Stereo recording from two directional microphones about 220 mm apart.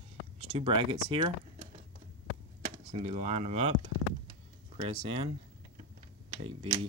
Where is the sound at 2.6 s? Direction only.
30° right (ahead or behind).